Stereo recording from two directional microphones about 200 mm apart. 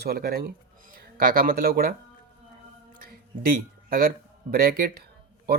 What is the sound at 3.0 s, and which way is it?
Speech, 45° right (ahead or behind).